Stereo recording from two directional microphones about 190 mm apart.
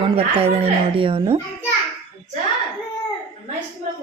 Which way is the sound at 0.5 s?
25° right (ahead or behind).